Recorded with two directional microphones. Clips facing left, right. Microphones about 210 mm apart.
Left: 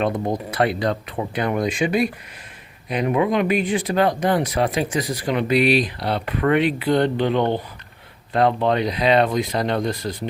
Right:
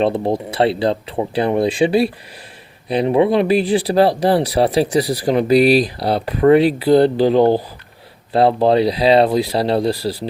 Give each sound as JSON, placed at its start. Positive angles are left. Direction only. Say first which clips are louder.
{"t": 0.0, "sound": "speech", "louder": "right 5 dB", "side_deg": -30}